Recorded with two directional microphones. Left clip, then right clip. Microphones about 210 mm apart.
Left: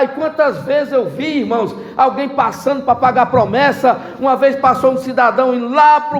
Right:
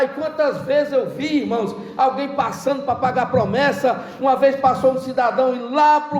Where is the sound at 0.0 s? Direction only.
30° left (ahead or behind).